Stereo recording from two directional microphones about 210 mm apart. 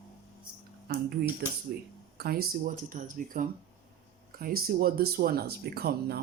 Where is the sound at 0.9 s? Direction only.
45° right (ahead or behind).